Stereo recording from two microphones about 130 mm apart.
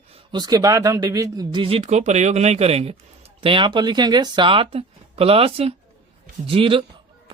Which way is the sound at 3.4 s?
40° right (ahead or behind).